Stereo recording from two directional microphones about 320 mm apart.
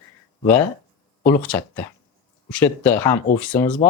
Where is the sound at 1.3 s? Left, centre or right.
Centre.